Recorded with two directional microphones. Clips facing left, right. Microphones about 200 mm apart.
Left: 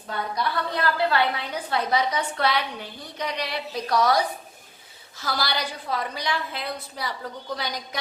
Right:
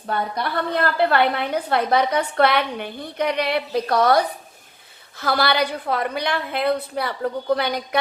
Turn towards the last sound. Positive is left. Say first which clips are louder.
# right 10 dB
turn(degrees=-60)  # may be behind; listen again after turning